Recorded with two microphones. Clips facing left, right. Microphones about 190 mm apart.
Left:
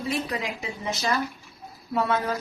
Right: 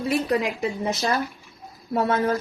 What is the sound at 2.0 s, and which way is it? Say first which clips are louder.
Speech: right 4 dB; 50° right (ahead or behind).